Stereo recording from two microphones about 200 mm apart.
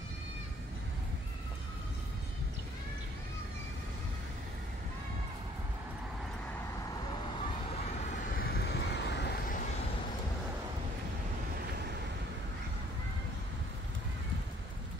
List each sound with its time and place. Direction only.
8.0 s vehicle: 45° left (ahead or behind)